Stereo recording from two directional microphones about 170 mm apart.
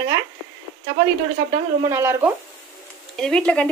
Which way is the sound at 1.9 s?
15° right (ahead or behind).